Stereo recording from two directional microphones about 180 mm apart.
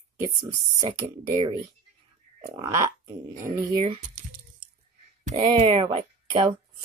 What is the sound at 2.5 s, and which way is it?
Speech, 15° right (ahead or behind).